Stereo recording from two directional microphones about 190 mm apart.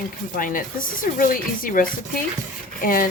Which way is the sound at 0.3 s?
45° left (ahead or behind).